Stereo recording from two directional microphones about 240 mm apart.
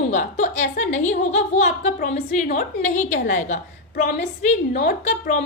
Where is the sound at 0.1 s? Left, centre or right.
Left.